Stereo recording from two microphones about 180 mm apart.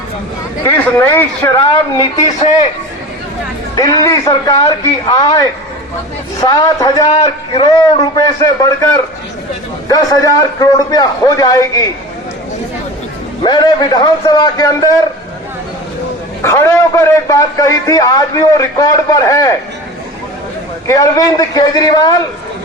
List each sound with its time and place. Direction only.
0.6 s a man's voice: 10° left (ahead or behind)
3.8 s a man's voice: 20° left (ahead or behind)
7.1 s a man's voice: 35° left (ahead or behind)
9.9 s a man's voice: 20° left (ahead or behind)
13.4 s a man's voice: 25° left (ahead or behind)
16.4 s a man's voice: 15° left (ahead or behind)
20.8 s a man's voice: 20° left (ahead or behind)